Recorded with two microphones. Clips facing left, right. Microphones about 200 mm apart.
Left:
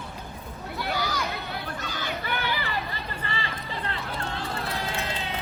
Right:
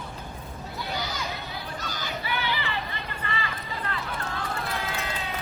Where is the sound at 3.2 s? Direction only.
30° left (ahead or behind).